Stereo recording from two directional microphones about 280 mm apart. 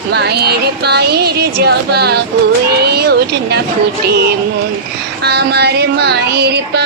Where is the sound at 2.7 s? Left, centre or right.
Right.